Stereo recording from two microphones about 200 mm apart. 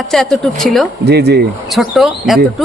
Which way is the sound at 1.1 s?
55° right (ahead or behind).